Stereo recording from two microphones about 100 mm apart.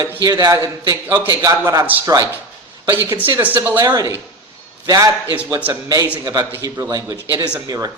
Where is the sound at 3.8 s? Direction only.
40° right (ahead or behind).